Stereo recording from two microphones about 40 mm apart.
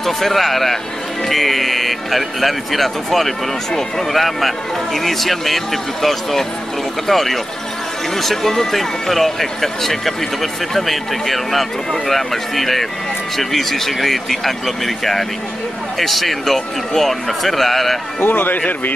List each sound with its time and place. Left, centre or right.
0.0 s speech: centre
16.0 s speech: centre
18.2 s speech: left